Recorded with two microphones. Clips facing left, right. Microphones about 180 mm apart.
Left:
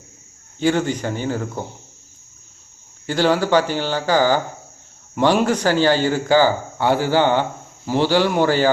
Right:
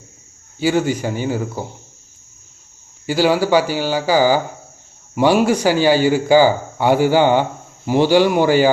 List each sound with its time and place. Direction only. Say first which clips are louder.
0.6 s speech: right 2 dB; 10° right (ahead or behind)
3.1 s speech: right 2 dB; 10° right (ahead or behind)